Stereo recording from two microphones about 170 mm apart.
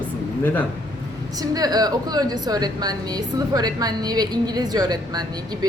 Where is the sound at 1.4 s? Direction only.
20° right (ahead or behind).